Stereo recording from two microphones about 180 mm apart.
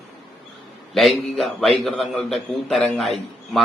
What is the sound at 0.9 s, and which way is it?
A man's voice, centre (ahead or behind).